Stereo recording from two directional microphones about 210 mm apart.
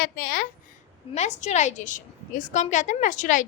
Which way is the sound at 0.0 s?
45° left (ahead or behind).